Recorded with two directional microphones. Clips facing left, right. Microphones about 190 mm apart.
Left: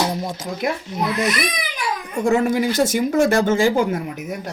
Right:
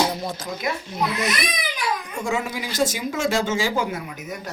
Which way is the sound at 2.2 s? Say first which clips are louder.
Left 10 dB; 60° left (ahead or behind).